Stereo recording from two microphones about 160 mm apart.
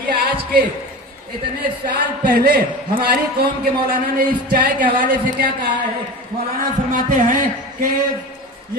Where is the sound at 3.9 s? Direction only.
60° right (ahead or behind).